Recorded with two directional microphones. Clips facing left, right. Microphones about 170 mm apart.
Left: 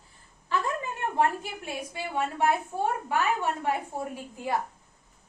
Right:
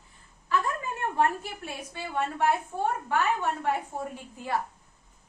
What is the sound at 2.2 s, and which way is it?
A child's voice, 10° left (ahead or behind).